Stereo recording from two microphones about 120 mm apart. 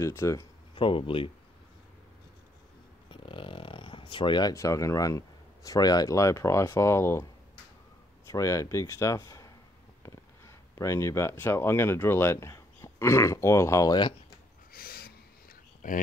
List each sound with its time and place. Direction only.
0.0 s speech: 25° left (ahead or behind)
0.7 s speech: 45° left (ahead or behind)
3.1 s speech: 45° left (ahead or behind); by 7.2 s 25° left (ahead or behind)
8.3 s speech: 25° left (ahead or behind)